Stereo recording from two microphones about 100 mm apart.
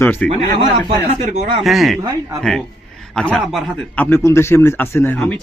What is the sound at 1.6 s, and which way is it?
Speech, centre (ahead or behind).